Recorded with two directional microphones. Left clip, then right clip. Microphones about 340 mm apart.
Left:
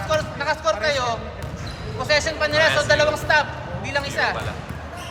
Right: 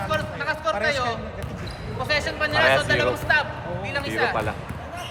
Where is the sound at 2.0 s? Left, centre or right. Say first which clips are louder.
Left 4 dB; centre.